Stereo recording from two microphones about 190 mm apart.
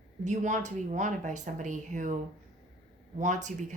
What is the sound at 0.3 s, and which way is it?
Speech, 40° right (ahead or behind).